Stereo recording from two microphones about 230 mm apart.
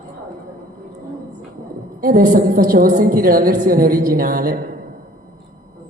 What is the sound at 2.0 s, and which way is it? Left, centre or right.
A woman's voice, right.